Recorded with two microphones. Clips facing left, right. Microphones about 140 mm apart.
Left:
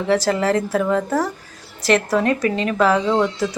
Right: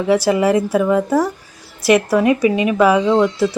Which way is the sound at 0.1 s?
10° right (ahead or behind).